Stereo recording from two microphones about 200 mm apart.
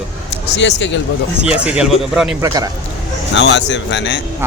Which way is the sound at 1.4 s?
5° right (ahead or behind).